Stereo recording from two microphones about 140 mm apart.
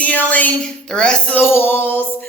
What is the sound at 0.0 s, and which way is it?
Speech, 10° left (ahead or behind).